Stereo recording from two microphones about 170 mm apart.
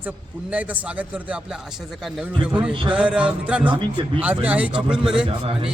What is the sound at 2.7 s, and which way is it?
Speech, 30° right (ahead or behind).